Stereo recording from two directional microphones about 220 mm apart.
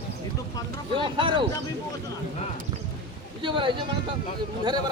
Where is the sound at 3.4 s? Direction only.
20° right (ahead or behind).